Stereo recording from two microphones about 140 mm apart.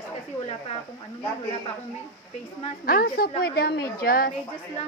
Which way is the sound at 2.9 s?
90° left.